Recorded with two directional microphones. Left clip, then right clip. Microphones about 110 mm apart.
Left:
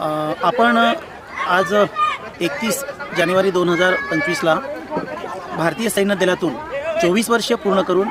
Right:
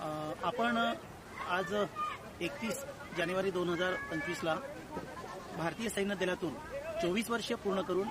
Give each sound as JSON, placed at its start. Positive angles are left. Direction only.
{"t": 0.0, "sound": "speech", "side_deg": 20}
{"t": 5.5, "sound": "speech", "side_deg": 15}